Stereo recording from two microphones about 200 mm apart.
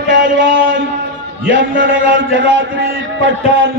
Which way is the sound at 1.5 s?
70° right (ahead or behind).